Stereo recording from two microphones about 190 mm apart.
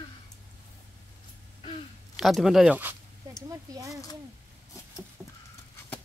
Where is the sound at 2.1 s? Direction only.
Centre (ahead or behind).